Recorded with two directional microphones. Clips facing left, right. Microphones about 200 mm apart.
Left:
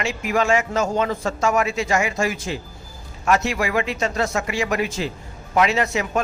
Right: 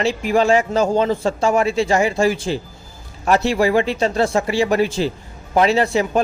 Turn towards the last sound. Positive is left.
turn(degrees=-30)  # may be behind; listen again after turning